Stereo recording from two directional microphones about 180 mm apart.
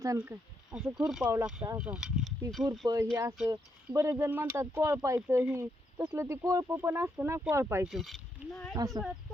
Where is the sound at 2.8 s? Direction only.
20° right (ahead or behind).